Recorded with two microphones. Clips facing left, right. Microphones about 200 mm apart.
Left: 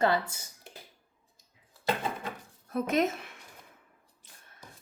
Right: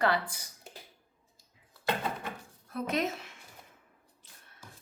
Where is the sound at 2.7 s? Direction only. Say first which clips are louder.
Left 4 dB; 50° left (ahead or behind).